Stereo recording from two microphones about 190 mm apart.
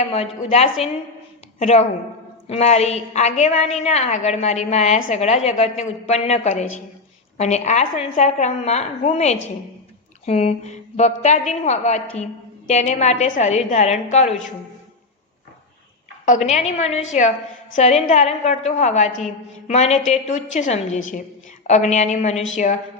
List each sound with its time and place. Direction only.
0.0 s a woman's voice: 30° left (ahead or behind)
16.2 s a woman's voice: 40° left (ahead or behind)